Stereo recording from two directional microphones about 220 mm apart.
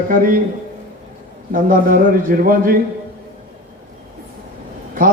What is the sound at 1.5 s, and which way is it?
A man's voice, 40° right (ahead or behind).